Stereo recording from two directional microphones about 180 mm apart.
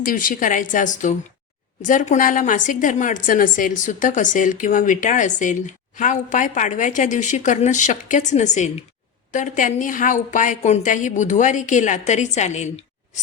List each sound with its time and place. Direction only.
0.0 s a woman's voice: 50° left (ahead or behind)